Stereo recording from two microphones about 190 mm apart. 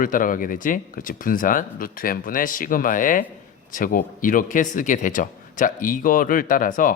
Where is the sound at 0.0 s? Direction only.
45° left (ahead or behind).